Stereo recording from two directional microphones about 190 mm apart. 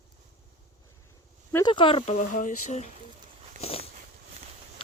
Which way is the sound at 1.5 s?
25° left (ahead or behind).